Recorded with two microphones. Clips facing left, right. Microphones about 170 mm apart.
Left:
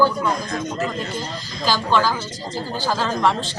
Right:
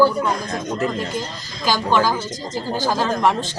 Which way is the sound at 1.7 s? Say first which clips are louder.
Right 1 dB; 15° right (ahead or behind).